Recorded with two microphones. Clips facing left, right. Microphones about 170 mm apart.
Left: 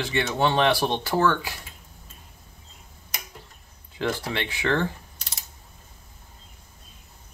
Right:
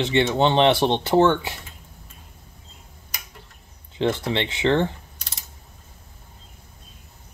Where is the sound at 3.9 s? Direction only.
25° right (ahead or behind).